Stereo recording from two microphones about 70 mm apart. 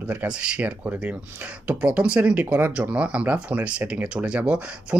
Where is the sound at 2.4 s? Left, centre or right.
Right.